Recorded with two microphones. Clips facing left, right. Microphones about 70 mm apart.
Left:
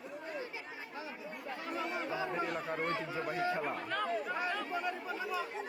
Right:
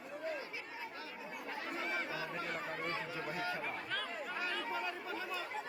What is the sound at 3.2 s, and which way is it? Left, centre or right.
Speech, left.